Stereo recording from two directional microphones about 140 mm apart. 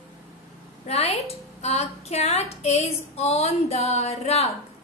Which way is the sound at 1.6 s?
50° left (ahead or behind).